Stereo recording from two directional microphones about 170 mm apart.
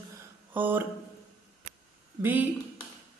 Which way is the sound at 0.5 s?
10° right (ahead or behind).